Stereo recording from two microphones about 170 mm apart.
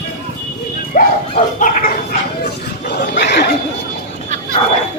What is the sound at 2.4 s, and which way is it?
Chatter, 80° left.